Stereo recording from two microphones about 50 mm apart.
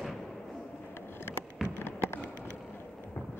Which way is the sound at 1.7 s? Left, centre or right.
Left.